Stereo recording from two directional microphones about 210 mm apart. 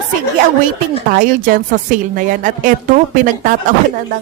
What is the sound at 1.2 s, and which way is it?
Speech, 40° right (ahead or behind).